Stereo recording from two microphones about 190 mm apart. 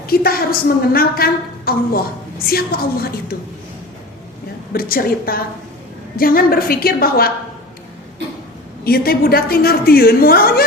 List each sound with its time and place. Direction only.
0.1 s a woman's voice: 50° left (ahead or behind)
4.7 s a woman's voice: 50° left (ahead or behind)
8.8 s a woman's voice: 55° left (ahead or behind)